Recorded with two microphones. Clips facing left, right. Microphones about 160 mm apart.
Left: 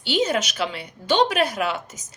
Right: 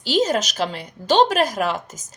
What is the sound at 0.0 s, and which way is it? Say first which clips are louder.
Speech: right 2 dB; 40° right (ahead or behind).